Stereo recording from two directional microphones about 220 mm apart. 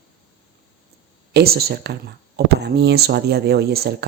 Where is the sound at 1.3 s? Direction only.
45° right (ahead or behind).